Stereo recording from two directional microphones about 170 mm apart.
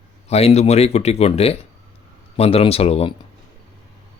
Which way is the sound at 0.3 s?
40° left (ahead or behind).